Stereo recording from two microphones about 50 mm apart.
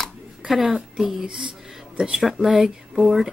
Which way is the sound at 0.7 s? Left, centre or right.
Centre.